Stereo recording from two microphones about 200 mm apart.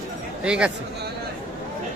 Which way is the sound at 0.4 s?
5° right (ahead or behind).